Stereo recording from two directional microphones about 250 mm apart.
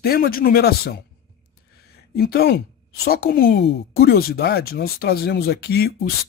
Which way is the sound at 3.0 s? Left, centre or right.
Left.